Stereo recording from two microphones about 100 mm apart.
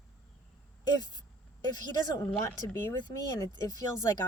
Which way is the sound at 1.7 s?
40° left (ahead or behind).